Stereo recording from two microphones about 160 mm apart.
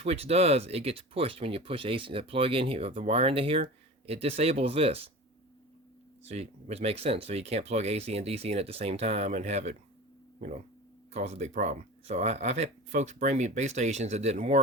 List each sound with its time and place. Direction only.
0.0 s speech: 40° right (ahead or behind)
6.2 s speech: 40° right (ahead or behind)
11.1 s speech: 45° right (ahead or behind)